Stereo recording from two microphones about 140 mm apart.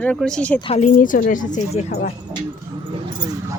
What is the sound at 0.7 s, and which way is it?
Speech, 60° left (ahead or behind).